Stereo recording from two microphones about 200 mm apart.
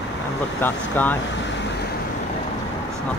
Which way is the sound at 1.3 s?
60° left (ahead or behind).